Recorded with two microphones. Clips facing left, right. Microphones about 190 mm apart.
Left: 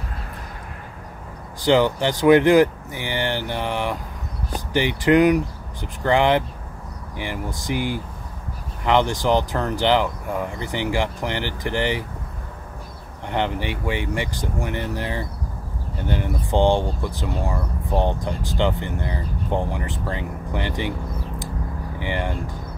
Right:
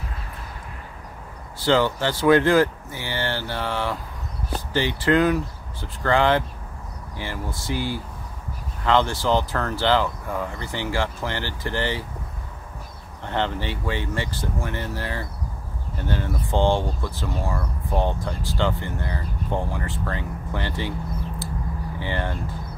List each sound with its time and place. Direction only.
1.6 s speech: 15° left (ahead or behind)
13.3 s speech: 15° left (ahead or behind)
22.0 s speech: 15° left (ahead or behind)